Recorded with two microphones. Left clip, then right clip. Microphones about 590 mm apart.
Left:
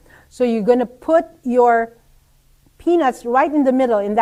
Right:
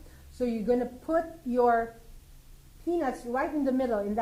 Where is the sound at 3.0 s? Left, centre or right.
Left.